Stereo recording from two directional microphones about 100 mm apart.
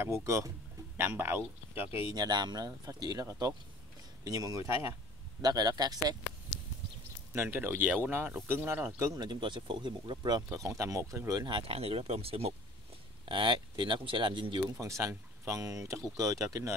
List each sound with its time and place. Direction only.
0.0 s speech: 30° right (ahead or behind)
2.1 s speech: 45° right (ahead or behind)
7.3 s speech: 20° right (ahead or behind)
9.2 s speech: 50° right (ahead or behind)
10.6 s speech: 30° right (ahead or behind)
11.6 s speech: 75° right (ahead or behind)
13.2 s speech: 55° right (ahead or behind)
14.8 s speech: 30° right (ahead or behind)